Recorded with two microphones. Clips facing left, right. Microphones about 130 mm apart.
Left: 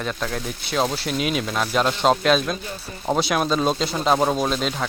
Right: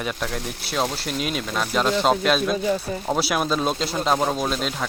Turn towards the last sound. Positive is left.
turn(degrees=0)  # may be behind; listen again after turning